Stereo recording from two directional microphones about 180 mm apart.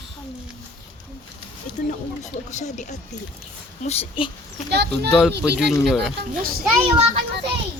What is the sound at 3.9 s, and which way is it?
Speech, 30° left (ahead or behind).